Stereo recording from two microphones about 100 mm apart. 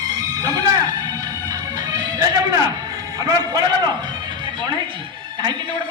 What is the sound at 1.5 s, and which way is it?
Music, 40° right (ahead or behind).